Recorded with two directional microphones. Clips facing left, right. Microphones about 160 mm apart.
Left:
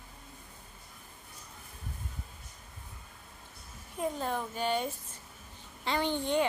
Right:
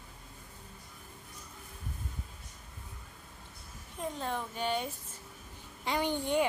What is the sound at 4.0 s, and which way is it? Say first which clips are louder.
Speech: left 3 dB; 5° left (ahead or behind).